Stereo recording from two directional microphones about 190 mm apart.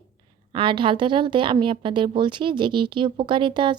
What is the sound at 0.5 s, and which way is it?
A woman's voice, 25° right (ahead or behind).